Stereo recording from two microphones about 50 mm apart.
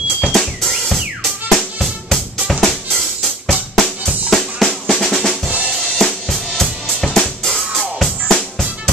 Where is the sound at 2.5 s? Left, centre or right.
Centre.